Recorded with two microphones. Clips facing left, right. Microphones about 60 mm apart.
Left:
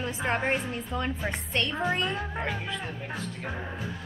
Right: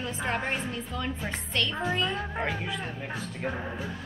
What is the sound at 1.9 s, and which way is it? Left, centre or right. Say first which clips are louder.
A woman's voice: right 1 dB; centre.